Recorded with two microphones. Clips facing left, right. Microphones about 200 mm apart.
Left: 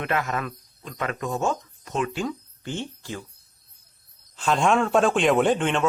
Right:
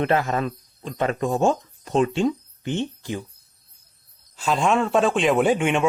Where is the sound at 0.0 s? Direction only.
30° right (ahead or behind).